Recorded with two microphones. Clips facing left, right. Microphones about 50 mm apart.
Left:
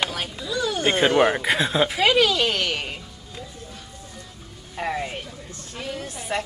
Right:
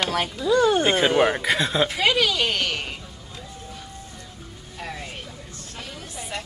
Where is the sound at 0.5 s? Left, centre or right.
Right.